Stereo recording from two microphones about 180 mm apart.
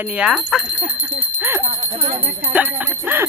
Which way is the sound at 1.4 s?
10° right (ahead or behind).